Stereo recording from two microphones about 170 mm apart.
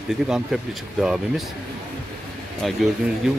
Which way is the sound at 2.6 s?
Centre (ahead or behind).